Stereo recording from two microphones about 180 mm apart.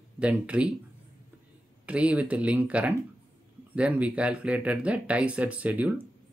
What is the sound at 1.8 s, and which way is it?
Speech, 5° right (ahead or behind).